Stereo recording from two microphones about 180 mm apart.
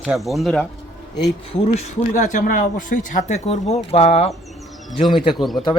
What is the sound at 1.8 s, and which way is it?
Speech, 45° left (ahead or behind).